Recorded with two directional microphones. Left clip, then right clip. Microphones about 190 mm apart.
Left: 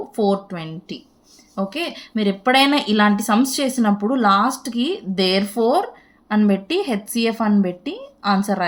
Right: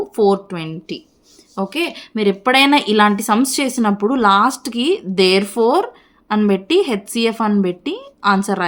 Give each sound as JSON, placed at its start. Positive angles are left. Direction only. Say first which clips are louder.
{"t": 0.0, "sound": "a woman's voice", "louder": "right 5 dB", "side_deg": -40}